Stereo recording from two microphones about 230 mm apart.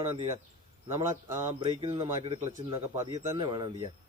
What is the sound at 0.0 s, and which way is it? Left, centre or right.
Speech, right.